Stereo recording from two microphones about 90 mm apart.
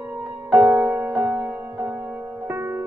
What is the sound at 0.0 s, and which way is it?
Music, 15° right (ahead or behind).